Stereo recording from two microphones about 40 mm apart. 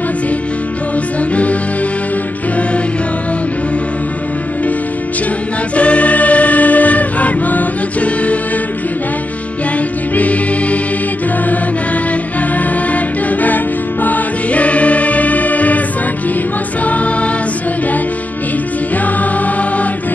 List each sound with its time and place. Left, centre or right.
1.3 s music: left
5.8 s choir: left
10.1 s music: left
12.5 s music: left
16.8 s music: left